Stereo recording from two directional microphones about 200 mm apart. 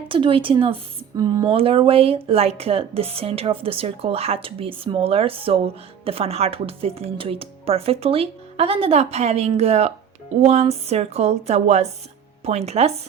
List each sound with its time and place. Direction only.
0.1 s a woman's voice: 25° right (ahead or behind)